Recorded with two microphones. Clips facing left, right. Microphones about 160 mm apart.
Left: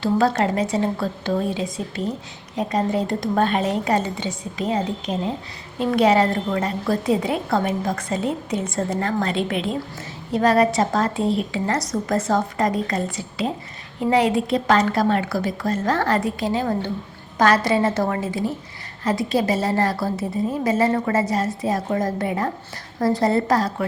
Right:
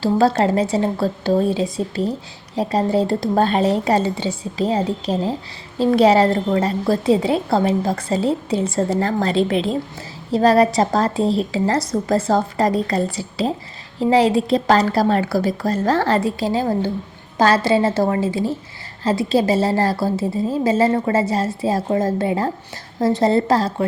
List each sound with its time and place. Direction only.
0.0 s a woman's voice: 30° right (ahead or behind)